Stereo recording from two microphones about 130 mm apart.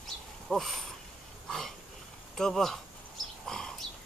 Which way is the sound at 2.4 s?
5° left (ahead or behind).